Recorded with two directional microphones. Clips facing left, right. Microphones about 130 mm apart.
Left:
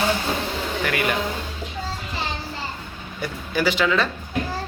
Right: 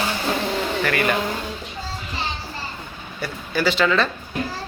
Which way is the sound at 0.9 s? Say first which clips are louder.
Right 1 dB; 15° left (ahead or behind).